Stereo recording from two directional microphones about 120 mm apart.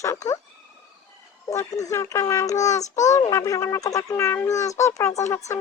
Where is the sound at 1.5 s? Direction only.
30° left (ahead or behind).